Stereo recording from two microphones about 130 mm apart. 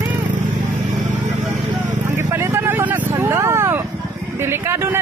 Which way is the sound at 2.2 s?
20° right (ahead or behind).